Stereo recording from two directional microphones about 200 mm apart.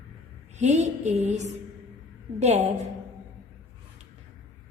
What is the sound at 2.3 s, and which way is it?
Speech, 35° right (ahead or behind).